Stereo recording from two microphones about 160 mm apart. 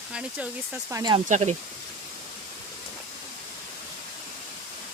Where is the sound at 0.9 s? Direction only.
20° right (ahead or behind).